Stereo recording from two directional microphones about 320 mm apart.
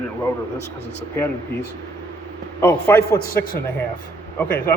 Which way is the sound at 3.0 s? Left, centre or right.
Left.